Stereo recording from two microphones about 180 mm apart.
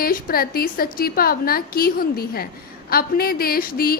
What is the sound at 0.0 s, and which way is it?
A woman's voice, 55° left (ahead or behind).